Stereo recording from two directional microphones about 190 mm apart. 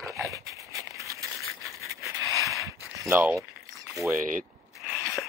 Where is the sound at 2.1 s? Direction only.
15° right (ahead or behind).